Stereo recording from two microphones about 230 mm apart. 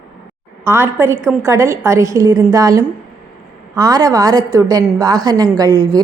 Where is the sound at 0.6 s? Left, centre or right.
Centre.